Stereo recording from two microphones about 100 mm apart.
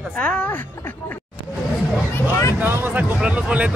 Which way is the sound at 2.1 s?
30° left (ahead or behind).